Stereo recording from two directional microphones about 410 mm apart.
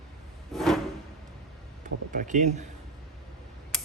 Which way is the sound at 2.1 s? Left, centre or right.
Centre.